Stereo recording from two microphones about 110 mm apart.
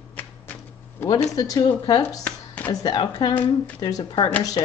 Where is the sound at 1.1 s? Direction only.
40° left (ahead or behind).